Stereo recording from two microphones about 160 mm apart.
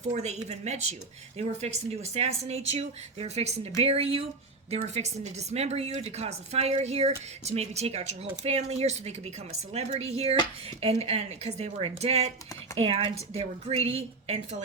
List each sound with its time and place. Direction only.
0.0 s a woman's voice: 45° right (ahead or behind)